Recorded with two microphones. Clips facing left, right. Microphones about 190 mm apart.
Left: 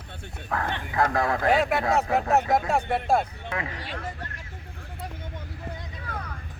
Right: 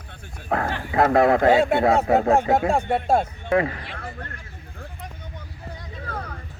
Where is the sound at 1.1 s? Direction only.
60° right (ahead or behind).